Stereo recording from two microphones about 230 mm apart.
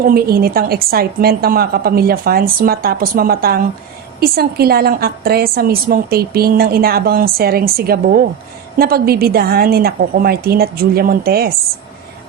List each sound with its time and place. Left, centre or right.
0.0 s a woman's voice: right